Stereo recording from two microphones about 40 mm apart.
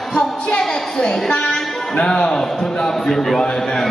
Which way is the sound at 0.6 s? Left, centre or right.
Centre.